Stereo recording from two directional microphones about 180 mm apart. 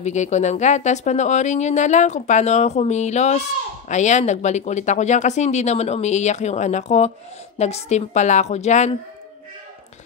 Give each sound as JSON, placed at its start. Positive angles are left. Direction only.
{"t": 0.0, "sound": "speech", "side_deg": 40}